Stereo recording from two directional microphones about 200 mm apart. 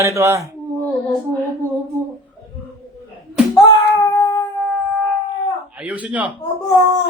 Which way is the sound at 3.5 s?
15° left (ahead or behind).